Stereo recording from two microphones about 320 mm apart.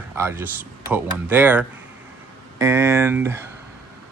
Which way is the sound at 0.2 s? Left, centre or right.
Centre.